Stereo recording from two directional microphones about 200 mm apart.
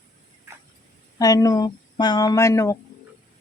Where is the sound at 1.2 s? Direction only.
20° left (ahead or behind).